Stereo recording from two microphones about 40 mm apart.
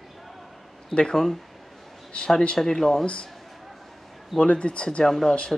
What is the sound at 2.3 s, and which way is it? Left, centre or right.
Speech, left.